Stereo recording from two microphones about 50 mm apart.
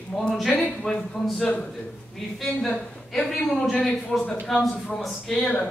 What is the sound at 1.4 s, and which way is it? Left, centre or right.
Speech, left.